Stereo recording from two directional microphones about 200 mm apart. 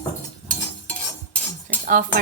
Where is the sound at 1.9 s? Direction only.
45° right (ahead or behind).